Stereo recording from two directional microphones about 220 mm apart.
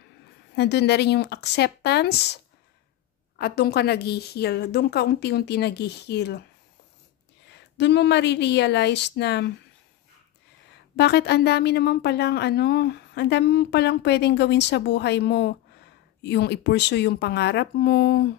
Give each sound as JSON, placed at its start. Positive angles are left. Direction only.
{"t": 0.6, "sound": "a woman's voice", "side_deg": 50}
{"t": 7.5, "sound": "a woman's voice", "side_deg": 50}
{"t": 11.0, "sound": "a woman's voice", "side_deg": 50}